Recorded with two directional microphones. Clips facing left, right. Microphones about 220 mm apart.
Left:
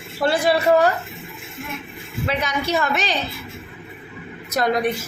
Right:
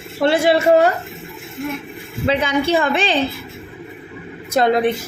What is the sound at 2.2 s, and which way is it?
Speech, 30° right (ahead or behind).